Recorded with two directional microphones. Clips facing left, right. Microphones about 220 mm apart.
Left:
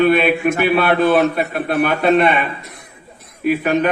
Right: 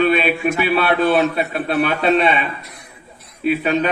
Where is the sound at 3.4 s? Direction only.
55° left (ahead or behind).